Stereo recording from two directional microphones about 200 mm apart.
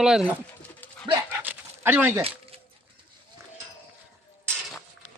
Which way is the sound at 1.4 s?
10° right (ahead or behind).